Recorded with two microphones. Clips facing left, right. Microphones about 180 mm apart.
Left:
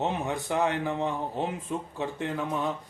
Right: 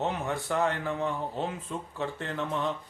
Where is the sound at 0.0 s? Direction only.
20° left (ahead or behind).